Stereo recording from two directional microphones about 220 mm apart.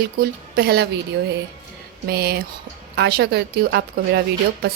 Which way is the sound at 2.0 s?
45° right (ahead or behind).